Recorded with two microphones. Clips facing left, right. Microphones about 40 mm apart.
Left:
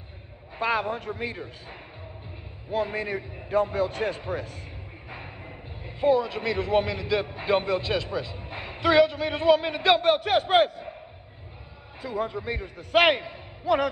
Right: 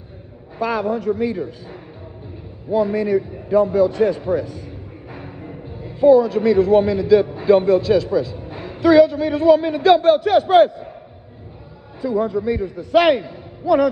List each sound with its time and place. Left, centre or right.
0.6 s a man's voice: left
12.0 s a man's voice: left